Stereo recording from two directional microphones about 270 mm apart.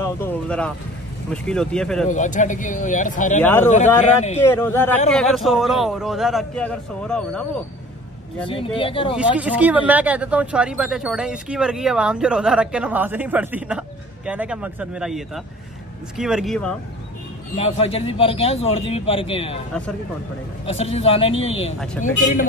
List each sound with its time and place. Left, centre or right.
0.0 s vehicle: centre
1.3 s speech: centre
2.0 s a man's voice: left
3.3 s speech: centre
8.5 s a man's voice: centre
9.1 s speech: centre
17.6 s a man's voice: left
20.6 s a man's voice: left